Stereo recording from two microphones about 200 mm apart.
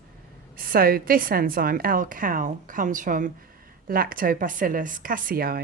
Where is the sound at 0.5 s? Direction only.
45° right (ahead or behind).